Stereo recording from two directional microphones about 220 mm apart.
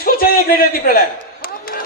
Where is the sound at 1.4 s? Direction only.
40° left (ahead or behind).